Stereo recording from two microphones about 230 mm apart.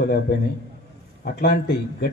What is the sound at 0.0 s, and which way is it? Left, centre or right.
A man's voice, left.